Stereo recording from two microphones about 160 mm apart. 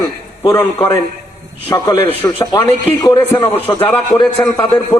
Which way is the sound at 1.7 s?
20° left (ahead or behind).